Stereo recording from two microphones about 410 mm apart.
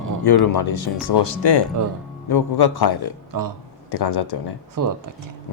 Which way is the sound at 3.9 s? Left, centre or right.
Left.